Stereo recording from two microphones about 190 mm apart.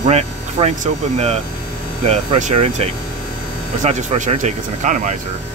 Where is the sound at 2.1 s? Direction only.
40° right (ahead or behind).